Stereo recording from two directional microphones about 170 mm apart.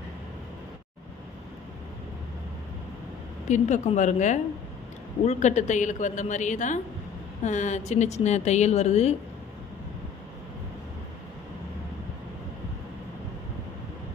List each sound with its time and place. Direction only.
3.4 s a woman's voice: 45° left (ahead or behind)